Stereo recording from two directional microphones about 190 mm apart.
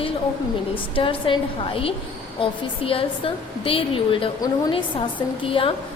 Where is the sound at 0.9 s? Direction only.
25° left (ahead or behind).